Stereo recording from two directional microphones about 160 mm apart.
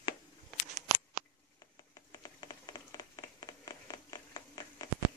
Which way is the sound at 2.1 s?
25° left (ahead or behind).